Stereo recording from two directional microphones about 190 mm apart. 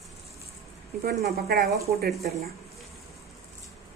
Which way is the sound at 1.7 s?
15° right (ahead or behind).